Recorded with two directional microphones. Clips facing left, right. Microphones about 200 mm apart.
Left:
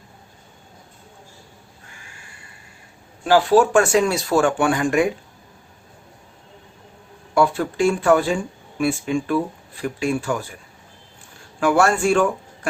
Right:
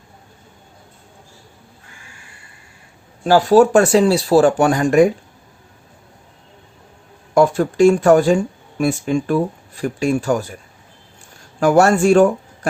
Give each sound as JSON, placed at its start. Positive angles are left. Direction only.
{"t": 3.2, "sound": "speech", "side_deg": -40}
{"t": 7.3, "sound": "speech", "side_deg": -45}
{"t": 11.6, "sound": "speech", "side_deg": -40}